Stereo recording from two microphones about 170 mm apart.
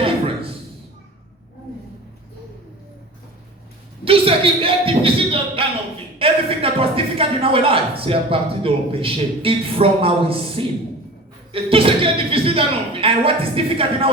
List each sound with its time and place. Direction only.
4.0 s a woman's voice: 35° right (ahead or behind)